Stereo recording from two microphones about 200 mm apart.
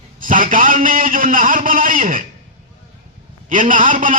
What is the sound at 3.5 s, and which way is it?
Speech, 40° right (ahead or behind).